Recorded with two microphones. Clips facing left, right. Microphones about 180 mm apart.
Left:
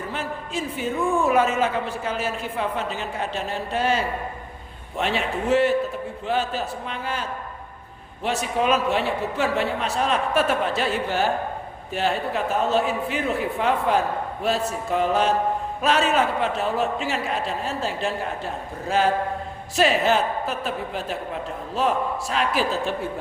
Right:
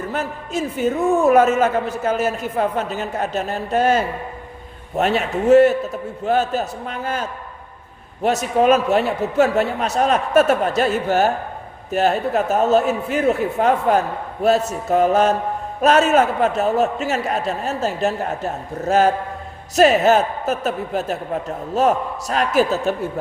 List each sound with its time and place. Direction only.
0.1 s a man's voice: 45° right (ahead or behind)